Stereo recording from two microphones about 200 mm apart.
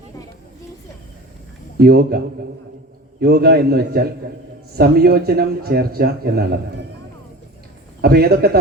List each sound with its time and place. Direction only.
1.8 s speech: 50° right (ahead or behind)
8.0 s speech: 50° right (ahead or behind)